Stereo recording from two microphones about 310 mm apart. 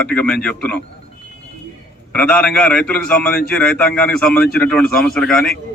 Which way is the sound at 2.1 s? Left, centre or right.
Centre.